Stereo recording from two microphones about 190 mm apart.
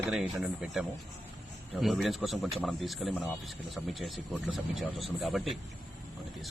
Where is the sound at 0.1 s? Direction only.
Centre (ahead or behind).